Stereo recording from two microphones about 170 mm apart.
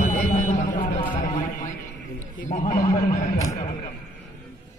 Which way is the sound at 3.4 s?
20° left (ahead or behind).